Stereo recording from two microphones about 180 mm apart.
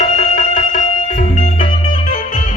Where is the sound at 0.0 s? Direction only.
40° left (ahead or behind).